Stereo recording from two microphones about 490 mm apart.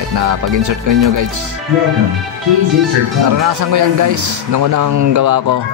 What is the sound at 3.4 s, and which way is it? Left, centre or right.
A man's voice, right.